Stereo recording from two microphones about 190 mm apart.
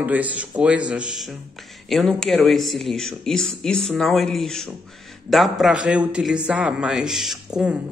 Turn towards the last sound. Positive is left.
turn(degrees=-5)  # may be behind; listen again after turning